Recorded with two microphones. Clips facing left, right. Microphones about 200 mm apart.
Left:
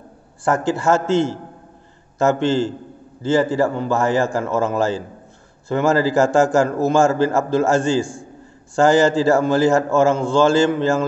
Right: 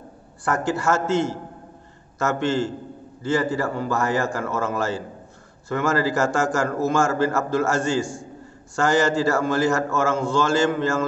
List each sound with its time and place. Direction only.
0.5 s a man's voice: 30° left (ahead or behind)